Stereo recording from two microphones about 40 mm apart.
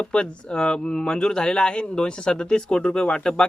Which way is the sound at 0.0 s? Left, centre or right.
Left.